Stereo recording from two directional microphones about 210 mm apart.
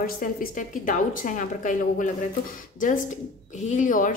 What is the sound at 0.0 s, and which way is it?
A woman's voice, 40° left (ahead or behind).